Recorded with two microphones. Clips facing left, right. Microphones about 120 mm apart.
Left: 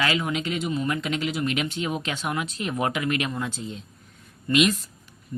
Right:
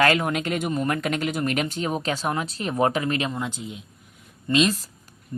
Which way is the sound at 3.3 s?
15° right (ahead or behind).